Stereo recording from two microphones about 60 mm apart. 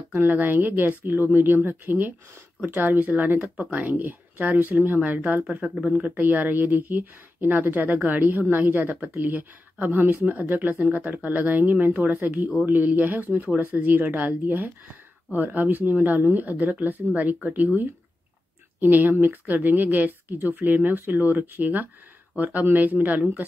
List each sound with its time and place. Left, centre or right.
0.1 s speech: right